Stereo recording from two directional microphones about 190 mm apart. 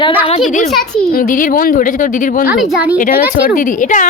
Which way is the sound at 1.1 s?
45° left (ahead or behind).